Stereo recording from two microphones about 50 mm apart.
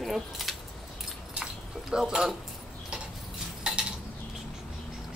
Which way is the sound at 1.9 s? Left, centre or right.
Centre.